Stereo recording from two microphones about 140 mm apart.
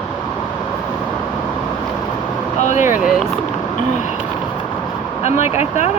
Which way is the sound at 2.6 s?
60° left (ahead or behind).